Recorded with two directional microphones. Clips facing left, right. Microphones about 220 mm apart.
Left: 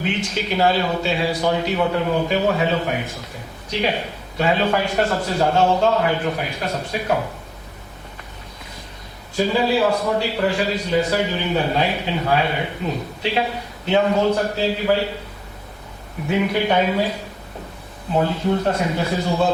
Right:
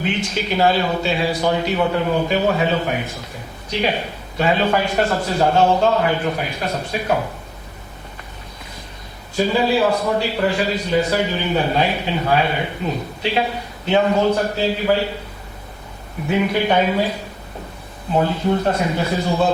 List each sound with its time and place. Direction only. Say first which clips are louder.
0.0 s a man's voice: right 1 dB; 10° right (ahead or behind)
9.4 s a man's voice: right 1 dB; 15° right (ahead or behind)
16.3 s a man's voice: right 1 dB; 15° right (ahead or behind)
18.2 s a man's voice: right 1 dB; 20° right (ahead or behind)